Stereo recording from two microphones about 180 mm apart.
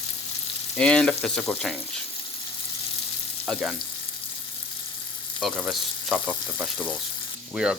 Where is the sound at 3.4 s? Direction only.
5° left (ahead or behind).